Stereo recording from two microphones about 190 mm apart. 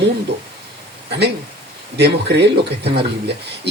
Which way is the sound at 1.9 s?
60° right (ahead or behind).